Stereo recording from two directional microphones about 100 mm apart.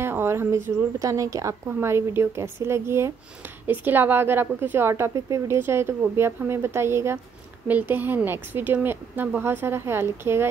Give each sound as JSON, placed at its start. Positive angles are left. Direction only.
{"t": 0.0, "sound": "a woman's voice", "side_deg": -25}